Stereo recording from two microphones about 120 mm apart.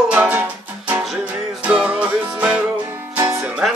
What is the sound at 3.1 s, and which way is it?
Music, 25° right (ahead or behind).